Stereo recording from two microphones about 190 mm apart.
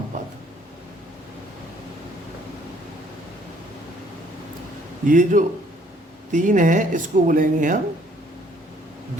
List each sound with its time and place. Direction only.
5.0 s speech: 45° right (ahead or behind)